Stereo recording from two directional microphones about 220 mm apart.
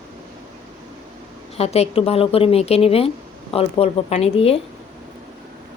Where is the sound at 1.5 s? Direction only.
30° left (ahead or behind).